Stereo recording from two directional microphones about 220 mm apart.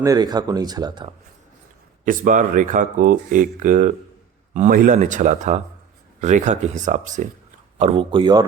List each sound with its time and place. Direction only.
0.0 s speech: 15° right (ahead or behind)
2.0 s speech: 35° right (ahead or behind); by 8.4 s 20° right (ahead or behind)